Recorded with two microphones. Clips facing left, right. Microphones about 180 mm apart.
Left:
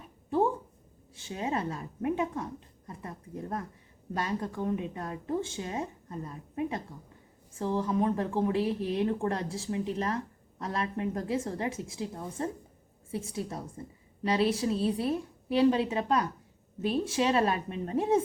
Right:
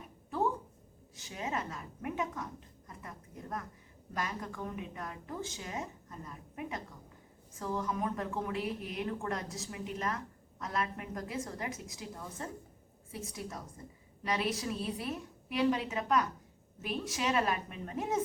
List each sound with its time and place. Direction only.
1.1 s speech: 30° left (ahead or behind)